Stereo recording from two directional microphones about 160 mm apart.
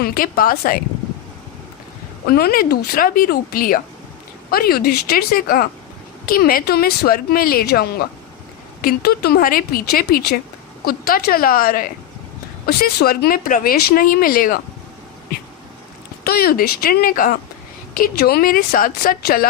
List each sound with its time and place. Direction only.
0.0 s speech: 65° left (ahead or behind)
2.2 s speech: 70° left (ahead or behind)
16.2 s speech: 75° left (ahead or behind)